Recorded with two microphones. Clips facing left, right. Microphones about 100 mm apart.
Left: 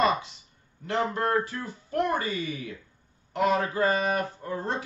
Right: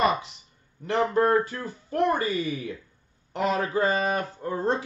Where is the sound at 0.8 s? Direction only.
25° right (ahead or behind).